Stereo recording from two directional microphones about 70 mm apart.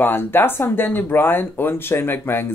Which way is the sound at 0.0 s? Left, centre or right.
Left.